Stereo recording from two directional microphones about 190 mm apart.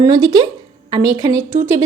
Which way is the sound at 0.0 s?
20° right (ahead or behind).